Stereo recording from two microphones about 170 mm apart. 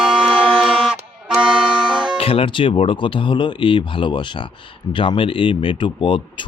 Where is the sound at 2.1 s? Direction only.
35° left (ahead or behind).